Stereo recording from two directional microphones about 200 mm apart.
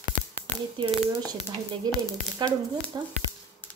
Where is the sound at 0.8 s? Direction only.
25° right (ahead or behind).